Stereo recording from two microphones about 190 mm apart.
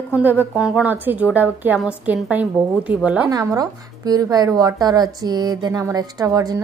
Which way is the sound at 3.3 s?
20° right (ahead or behind).